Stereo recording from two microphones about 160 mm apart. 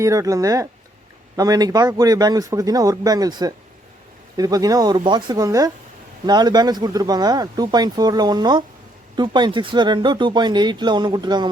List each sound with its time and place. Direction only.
0.0 s speech: 20° right (ahead or behind)